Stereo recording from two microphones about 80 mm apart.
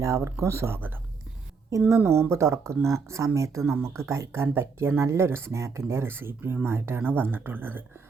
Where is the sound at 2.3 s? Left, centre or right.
Right.